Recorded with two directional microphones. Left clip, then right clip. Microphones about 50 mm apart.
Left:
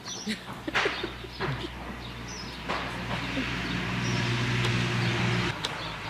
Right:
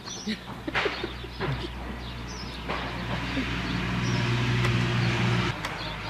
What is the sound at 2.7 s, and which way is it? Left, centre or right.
Vehicle, left.